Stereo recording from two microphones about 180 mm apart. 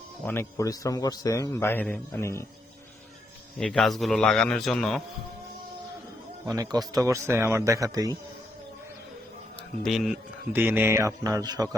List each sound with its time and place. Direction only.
0.3 s a man's voice: 15° left (ahead or behind)
3.6 s a man's voice: centre (ahead or behind)
6.4 s speech: 20° right (ahead or behind)
9.8 s speech: centre (ahead or behind); by 11.8 s 20° right (ahead or behind)